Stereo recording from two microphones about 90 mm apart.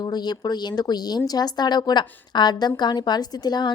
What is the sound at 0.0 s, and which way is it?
Speech, 50° left (ahead or behind).